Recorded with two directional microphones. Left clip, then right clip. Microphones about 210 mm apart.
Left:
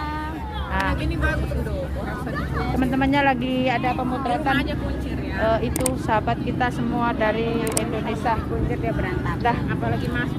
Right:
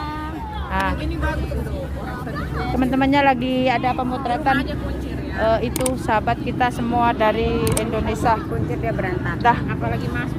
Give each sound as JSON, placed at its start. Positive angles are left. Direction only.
{"t": 2.7, "sound": "speech", "side_deg": -45}
{"t": 9.5, "sound": "speech", "side_deg": -40}